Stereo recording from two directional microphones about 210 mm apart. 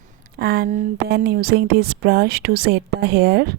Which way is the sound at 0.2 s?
50° right (ahead or behind).